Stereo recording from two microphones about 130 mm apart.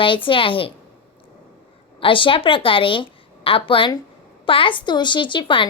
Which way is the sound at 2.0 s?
40° left (ahead or behind).